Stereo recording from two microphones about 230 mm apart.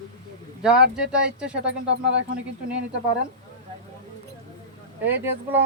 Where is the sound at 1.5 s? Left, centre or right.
Right.